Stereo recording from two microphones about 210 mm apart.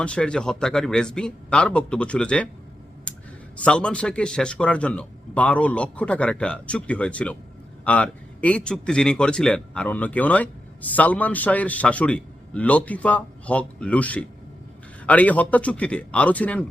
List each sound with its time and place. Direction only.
0.0 s a man's voice: 5° left (ahead or behind)
3.6 s a man's voice: 5° left (ahead or behind)